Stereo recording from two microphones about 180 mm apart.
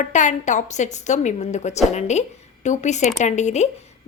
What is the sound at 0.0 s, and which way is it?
A woman's voice, 45° left (ahead or behind).